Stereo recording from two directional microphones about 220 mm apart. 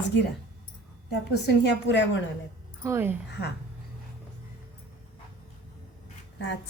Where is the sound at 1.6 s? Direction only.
55° left (ahead or behind).